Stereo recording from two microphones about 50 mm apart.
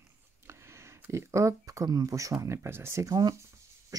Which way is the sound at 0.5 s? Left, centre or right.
Right.